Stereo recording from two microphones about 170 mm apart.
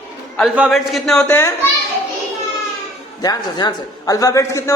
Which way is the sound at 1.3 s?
15° left (ahead or behind).